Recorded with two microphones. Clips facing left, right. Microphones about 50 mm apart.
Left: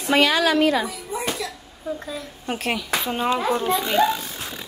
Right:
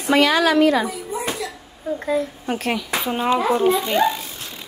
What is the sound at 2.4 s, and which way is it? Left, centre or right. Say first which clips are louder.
Speech: right 2 dB; centre.